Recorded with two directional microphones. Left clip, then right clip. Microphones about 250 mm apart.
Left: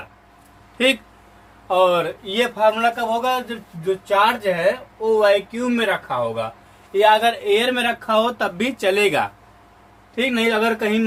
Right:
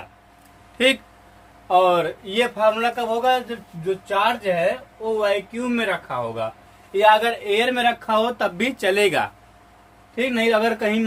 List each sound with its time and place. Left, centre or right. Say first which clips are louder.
0.8 s speech: even; centre